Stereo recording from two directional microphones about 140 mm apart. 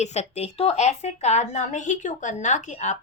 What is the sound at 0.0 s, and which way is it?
A woman's voice, 55° left (ahead or behind).